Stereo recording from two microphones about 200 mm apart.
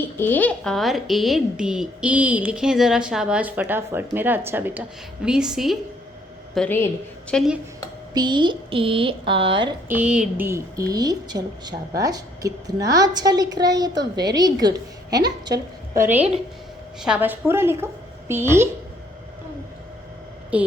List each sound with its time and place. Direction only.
0.2 s a woman's voice: 10° left (ahead or behind)
8.1 s a woman's voice: 20° right (ahead or behind)
9.9 s a woman's voice: 5° right (ahead or behind)
20.5 s a woman's voice: 5° right (ahead or behind)